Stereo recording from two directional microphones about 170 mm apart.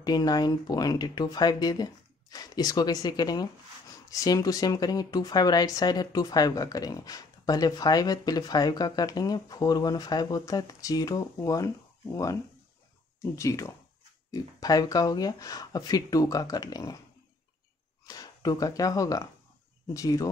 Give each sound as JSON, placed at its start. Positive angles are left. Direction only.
{"t": 0.0, "sound": "speech", "side_deg": 25}
{"t": 18.0, "sound": "speech", "side_deg": 20}